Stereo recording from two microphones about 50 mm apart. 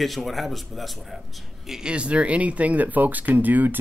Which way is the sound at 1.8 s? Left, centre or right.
Right.